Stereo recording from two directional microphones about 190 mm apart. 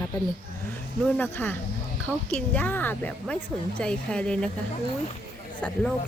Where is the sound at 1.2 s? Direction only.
10° left (ahead or behind).